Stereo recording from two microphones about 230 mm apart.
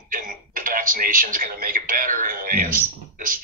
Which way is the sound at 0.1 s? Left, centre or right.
Right.